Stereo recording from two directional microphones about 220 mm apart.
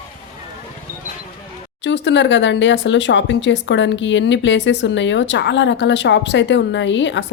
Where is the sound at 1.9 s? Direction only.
55° left (ahead or behind).